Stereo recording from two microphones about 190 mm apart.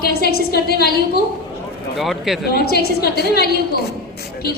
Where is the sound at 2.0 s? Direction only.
Centre (ahead or behind).